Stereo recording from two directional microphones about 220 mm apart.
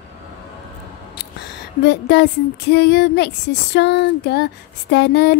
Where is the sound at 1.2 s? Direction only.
45° left (ahead or behind).